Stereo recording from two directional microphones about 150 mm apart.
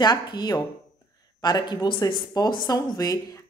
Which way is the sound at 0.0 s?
30° left (ahead or behind).